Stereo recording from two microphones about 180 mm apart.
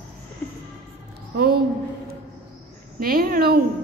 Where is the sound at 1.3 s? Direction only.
60° right (ahead or behind).